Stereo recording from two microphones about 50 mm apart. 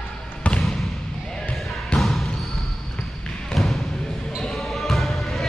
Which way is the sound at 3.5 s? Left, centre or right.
Centre.